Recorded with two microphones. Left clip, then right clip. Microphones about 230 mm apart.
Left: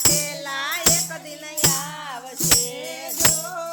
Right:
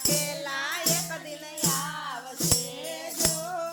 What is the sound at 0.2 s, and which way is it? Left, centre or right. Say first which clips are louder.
Music: left 4 dB; centre.